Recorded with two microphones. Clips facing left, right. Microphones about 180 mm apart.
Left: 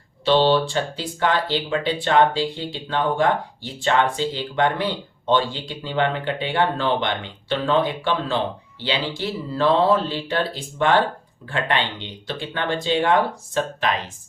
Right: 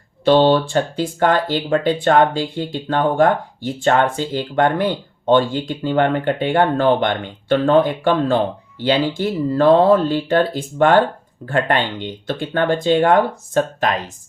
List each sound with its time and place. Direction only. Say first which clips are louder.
0.3 s speech: right 4 dB; 50° right (ahead or behind)